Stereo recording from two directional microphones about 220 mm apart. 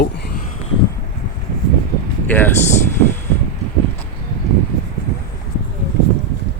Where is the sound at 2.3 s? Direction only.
10° left (ahead or behind).